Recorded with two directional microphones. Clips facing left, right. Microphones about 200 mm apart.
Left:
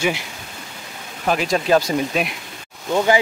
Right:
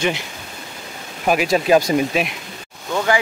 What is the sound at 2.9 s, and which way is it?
Speech, 20° left (ahead or behind).